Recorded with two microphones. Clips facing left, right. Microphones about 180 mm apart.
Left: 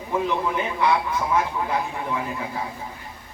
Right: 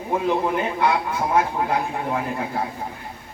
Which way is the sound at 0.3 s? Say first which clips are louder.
Right 3 dB; 55° right (ahead or behind).